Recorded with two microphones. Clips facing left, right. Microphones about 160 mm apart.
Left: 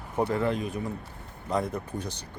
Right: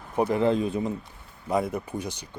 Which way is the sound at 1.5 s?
10° right (ahead or behind).